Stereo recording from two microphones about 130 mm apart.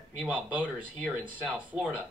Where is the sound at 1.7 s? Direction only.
10° right (ahead or behind).